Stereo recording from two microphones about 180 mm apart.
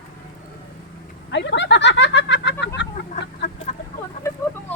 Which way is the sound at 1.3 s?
75° left (ahead or behind).